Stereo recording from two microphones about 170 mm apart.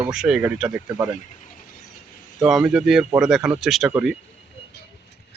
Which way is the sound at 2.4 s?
5° right (ahead or behind).